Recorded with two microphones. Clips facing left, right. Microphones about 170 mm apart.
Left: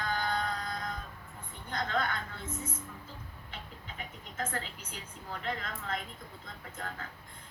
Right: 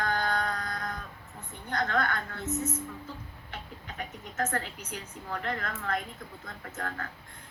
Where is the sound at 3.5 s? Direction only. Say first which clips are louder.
Right 5 dB; 50° right (ahead or behind).